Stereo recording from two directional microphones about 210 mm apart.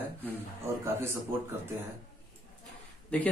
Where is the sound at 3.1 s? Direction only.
5° left (ahead or behind).